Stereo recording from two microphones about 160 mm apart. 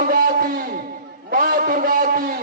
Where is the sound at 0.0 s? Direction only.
65° right (ahead or behind).